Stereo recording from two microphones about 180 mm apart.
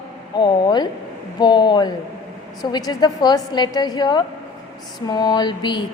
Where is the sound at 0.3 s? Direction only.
25° left (ahead or behind).